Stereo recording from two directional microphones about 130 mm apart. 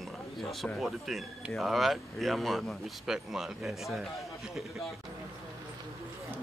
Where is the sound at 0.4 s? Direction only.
Centre (ahead or behind).